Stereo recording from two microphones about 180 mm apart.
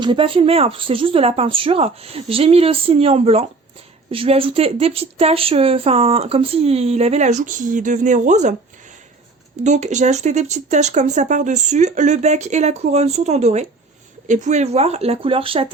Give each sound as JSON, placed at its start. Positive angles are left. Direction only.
{"t": 0.0, "sound": "speech", "side_deg": -30}
{"t": 9.6, "sound": "speech", "side_deg": -40}